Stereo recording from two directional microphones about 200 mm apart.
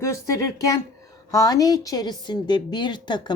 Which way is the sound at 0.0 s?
15° left (ahead or behind).